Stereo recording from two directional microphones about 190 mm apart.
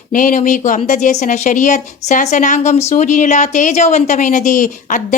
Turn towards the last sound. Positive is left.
turn(degrees=40)  # may be behind; listen again after turning